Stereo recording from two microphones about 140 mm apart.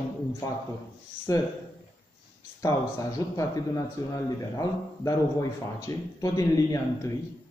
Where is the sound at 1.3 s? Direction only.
25° left (ahead or behind).